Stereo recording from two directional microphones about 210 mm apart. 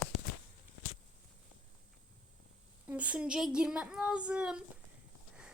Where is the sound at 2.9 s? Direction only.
5° right (ahead or behind).